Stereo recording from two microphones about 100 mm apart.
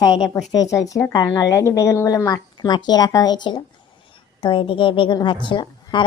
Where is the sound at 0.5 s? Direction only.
35° left (ahead or behind).